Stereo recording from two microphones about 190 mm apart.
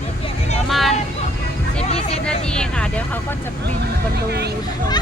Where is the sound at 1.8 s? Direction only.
35° left (ahead or behind).